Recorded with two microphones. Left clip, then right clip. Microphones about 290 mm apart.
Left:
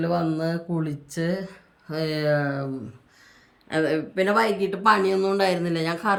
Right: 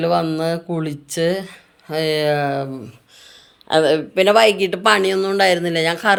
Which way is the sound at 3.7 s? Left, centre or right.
Right.